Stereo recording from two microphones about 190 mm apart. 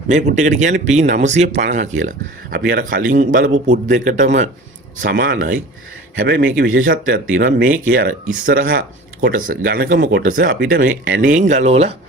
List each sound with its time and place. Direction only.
0.1 s a man's voice: 40° right (ahead or behind)
4.9 s a man's voice: 50° right (ahead or behind); by 11.9 s 30° right (ahead or behind)